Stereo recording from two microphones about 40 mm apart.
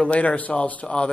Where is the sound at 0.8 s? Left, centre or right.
Left.